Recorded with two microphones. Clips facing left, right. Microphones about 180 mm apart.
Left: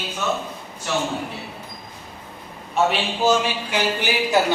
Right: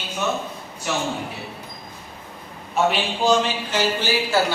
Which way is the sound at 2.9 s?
5° left (ahead or behind).